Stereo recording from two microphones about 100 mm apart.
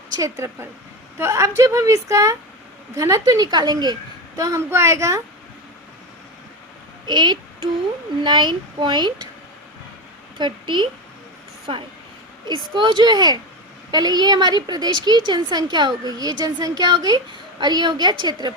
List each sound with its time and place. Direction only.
0.2 s a woman's voice: 30° right (ahead or behind); by 3.9 s 45° right (ahead or behind)
4.4 s a woman's voice: 30° right (ahead or behind)
7.1 s a woman's voice: 50° right (ahead or behind)
10.3 s a woman's voice: 50° right (ahead or behind)